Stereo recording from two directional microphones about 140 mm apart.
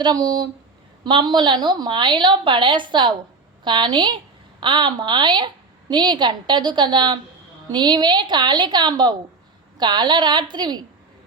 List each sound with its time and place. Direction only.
0.0 s a woman's voice: 30° right (ahead or behind)